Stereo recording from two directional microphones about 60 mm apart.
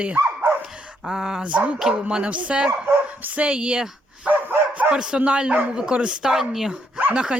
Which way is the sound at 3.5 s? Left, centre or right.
Centre.